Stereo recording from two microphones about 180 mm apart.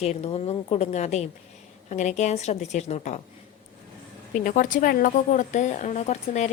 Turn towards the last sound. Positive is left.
turn(degrees=40)  # may be behind; listen again after turning